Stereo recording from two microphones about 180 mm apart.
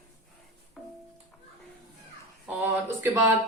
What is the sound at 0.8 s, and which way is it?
Music, centre (ahead or behind).